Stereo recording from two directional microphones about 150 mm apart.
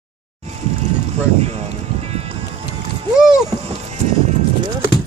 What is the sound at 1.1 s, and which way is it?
Music, 45° right (ahead or behind).